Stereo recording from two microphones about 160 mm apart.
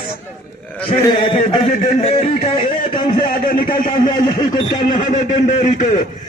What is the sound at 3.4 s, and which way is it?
Speech, 60° left (ahead or behind).